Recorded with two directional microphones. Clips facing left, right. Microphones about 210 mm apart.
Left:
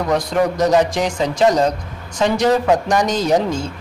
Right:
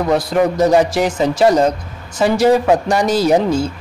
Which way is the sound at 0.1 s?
5° right (ahead or behind).